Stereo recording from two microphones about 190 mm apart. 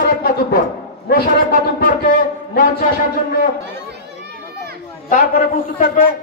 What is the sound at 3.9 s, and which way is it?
Children playing, 60° right (ahead or behind).